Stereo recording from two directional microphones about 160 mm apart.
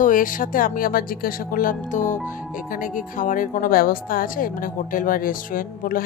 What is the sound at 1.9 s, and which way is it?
Speech, 50° left (ahead or behind).